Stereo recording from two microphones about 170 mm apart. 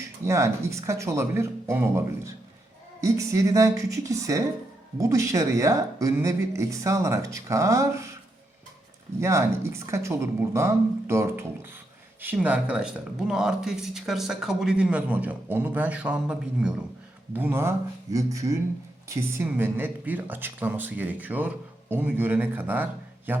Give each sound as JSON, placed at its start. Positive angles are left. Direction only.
{"t": 0.3, "sound": "speech", "side_deg": -15}
{"t": 9.2, "sound": "speech", "side_deg": -15}